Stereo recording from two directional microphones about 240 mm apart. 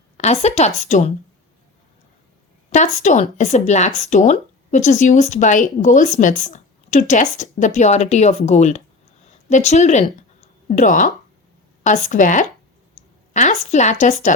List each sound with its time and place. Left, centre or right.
0.2 s speech: left
2.6 s speech: left